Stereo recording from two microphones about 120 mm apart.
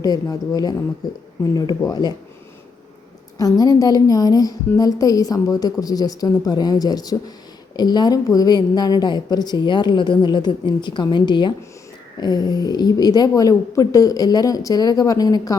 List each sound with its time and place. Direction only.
0.0 s a woman's voice: 30° left (ahead or behind)
1.9 s a woman's voice: 35° left (ahead or behind)
3.3 s a woman's voice: 30° left (ahead or behind)